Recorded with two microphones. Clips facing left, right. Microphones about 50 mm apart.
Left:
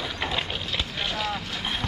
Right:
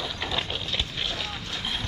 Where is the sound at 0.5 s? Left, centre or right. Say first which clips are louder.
Left 1 dB; centre.